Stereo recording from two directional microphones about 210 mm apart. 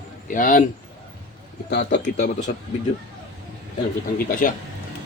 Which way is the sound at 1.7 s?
55° left (ahead or behind).